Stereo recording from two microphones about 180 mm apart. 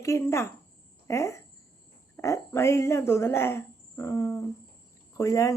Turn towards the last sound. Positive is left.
turn(degrees=15)  # may be behind; listen again after turning